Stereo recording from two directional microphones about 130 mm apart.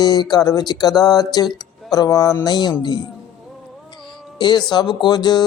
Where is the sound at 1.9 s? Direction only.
30° left (ahead or behind).